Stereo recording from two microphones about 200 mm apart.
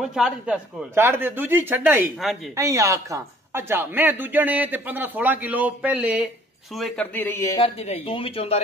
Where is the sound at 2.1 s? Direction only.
Centre (ahead or behind).